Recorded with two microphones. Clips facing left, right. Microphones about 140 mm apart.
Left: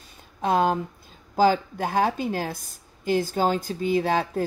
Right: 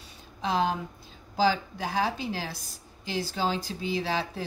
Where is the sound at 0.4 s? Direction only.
50° left (ahead or behind).